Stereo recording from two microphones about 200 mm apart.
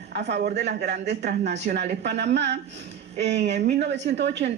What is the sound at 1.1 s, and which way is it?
Speech, 55° right (ahead or behind).